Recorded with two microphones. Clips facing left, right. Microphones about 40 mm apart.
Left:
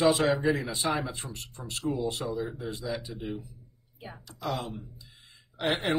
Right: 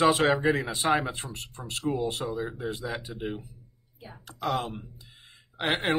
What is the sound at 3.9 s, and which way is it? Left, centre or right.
Speech, centre.